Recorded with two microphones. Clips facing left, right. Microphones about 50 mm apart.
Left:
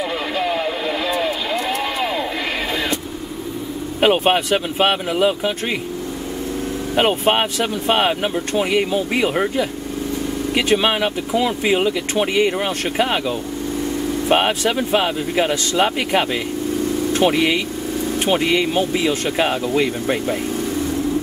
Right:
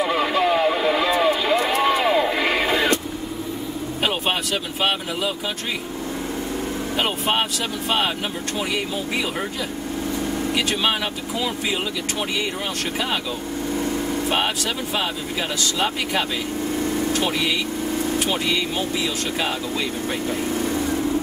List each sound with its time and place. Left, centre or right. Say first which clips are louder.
0.0 s a sound: right 2 dB; centre
0.7 s vehicle: right 2 dB; centre
1.8 s a sound: right 4 dB; centre
4.0 s speech: left 8 dB; left
7.0 s speech: left 6 dB; left
8.5 s speech: left 8 dB; left
14.3 s speech: left 10 dB; left